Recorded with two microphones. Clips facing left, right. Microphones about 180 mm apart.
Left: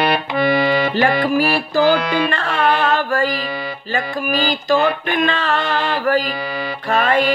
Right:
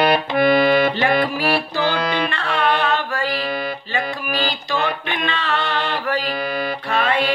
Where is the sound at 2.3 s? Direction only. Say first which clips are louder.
Left 2 dB; 45° left (ahead or behind).